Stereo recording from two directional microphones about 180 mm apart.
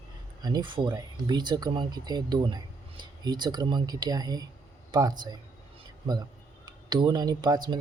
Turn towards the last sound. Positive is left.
turn(degrees=-25)  # may be behind; listen again after turning